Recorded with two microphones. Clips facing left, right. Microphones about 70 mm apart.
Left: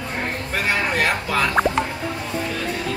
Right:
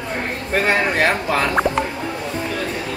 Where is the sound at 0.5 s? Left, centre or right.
Right.